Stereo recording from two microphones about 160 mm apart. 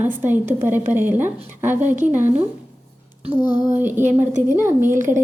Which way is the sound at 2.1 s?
50° right (ahead or behind).